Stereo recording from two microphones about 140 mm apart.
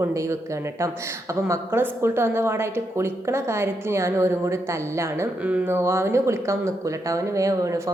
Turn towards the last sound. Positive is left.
turn(degrees=-25)  # may be behind; listen again after turning